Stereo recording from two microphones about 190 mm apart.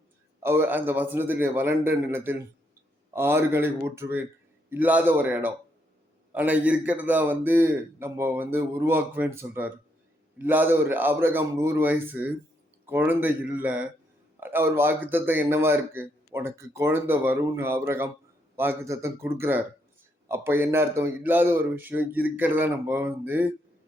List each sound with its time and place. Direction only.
0.4 s a man's voice: 10° right (ahead or behind)